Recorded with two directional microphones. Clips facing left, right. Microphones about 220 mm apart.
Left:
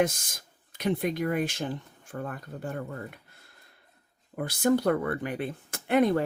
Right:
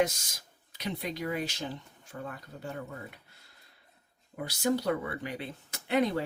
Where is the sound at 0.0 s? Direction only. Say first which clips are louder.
Left 2 dB; 50° left (ahead or behind).